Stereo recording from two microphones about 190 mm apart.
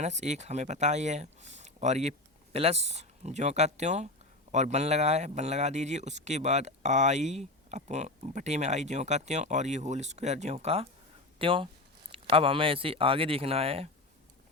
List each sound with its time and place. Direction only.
0.0 s speech: 40° right (ahead or behind)